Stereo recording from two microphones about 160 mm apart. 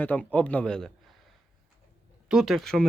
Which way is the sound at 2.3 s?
Centre (ahead or behind).